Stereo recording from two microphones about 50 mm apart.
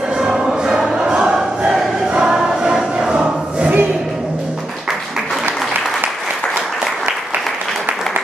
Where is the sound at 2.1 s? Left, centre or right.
Centre.